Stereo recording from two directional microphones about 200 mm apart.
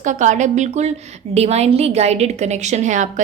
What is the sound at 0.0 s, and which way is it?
A woman's voice, 40° right (ahead or behind).